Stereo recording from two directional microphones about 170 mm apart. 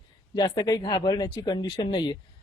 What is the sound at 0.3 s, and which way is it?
Speech, 25° left (ahead or behind).